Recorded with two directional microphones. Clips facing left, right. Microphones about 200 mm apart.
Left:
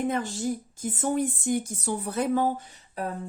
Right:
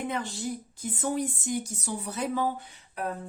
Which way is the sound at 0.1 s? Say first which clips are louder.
Left 4 dB; 45° left (ahead or behind).